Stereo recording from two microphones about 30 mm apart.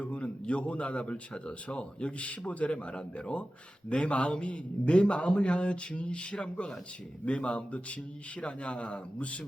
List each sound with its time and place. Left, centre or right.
0.0 s a man's voice: left
2.1 s a man's voice: left